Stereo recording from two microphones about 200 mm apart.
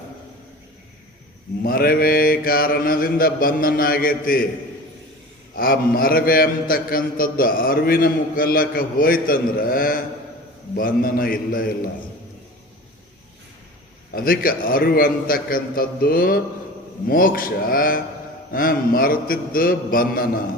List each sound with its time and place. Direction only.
1.6 s a man's voice: 45° left (ahead or behind)
5.5 s a man's voice: 45° left (ahead or behind)
14.2 s a man's voice: 45° left (ahead or behind)